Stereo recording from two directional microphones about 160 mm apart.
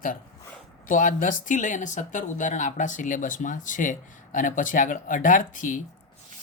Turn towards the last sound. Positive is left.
turn(degrees=55)  # may be behind; listen again after turning